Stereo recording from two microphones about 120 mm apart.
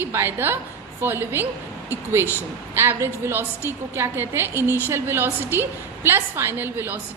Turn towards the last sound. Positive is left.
turn(degrees=-15)  # may be behind; listen again after turning